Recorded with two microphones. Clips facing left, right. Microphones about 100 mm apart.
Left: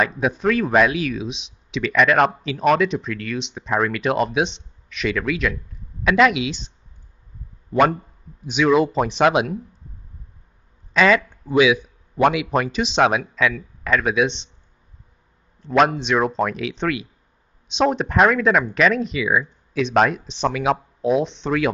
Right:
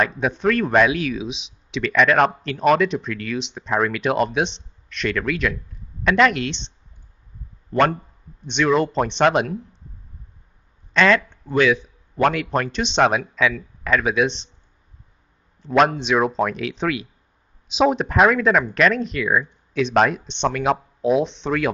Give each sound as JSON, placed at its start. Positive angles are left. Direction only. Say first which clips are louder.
{"t": 0.0, "sound": "speech", "louder": "even", "side_deg": 0}
{"t": 7.7, "sound": "speech", "louder": "left 1 dB", "side_deg": 5}
{"t": 10.9, "sound": "a man's voice", "louder": "left 1 dB", "side_deg": 5}
{"t": 15.6, "sound": "speech", "louder": "even", "side_deg": 0}